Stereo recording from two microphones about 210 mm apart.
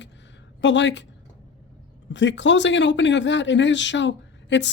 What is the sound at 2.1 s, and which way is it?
Speech, 60° left (ahead or behind).